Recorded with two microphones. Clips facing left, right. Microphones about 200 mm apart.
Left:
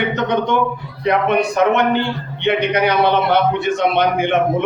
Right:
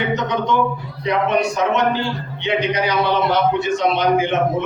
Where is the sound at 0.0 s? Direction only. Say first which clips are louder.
Left 2 dB; 60° left (ahead or behind).